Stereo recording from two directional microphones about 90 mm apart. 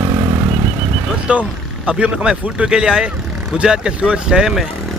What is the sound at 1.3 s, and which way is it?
Speech, 15° right (ahead or behind).